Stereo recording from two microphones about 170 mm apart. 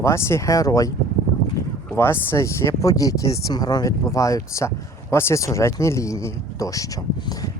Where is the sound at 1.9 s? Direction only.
15° left (ahead or behind).